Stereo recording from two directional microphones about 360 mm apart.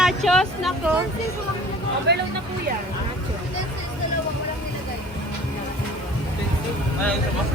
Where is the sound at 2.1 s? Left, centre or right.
Right.